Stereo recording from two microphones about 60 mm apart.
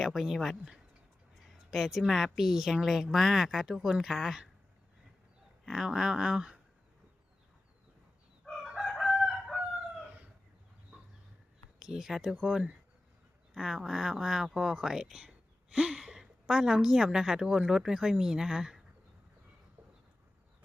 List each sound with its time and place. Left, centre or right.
0.0 s speech: centre
1.7 s speech: centre
5.6 s speech: centre
8.4 s crowing: centre
9.0 s chicken: centre
11.8 s a woman's voice: centre